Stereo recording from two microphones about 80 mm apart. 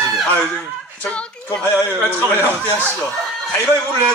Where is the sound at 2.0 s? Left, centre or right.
Left.